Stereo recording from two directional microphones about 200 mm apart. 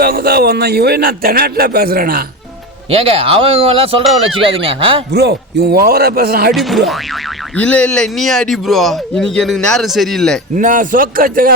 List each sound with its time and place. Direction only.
0.0 s a man's voice: 50° right (ahead or behind)
2.9 s speech: 30° right (ahead or behind)
5.1 s a man's voice: 55° right (ahead or behind)
6.5 s speech: centre (ahead or behind)
10.5 s a man's voice: 40° right (ahead or behind)